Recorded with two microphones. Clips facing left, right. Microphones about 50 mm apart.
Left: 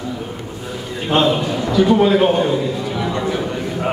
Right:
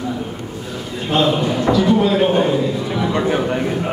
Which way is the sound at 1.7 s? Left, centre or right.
Centre.